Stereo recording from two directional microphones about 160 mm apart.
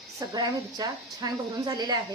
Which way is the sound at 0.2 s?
25° right (ahead or behind).